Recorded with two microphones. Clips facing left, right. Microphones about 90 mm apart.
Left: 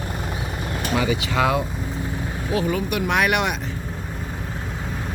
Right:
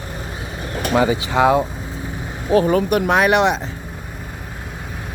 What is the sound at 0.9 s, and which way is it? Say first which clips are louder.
Speech: right 6 dB; 30° right (ahead or behind).